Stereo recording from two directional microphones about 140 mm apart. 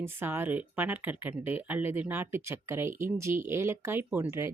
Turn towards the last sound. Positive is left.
turn(degrees=-15)  # may be behind; listen again after turning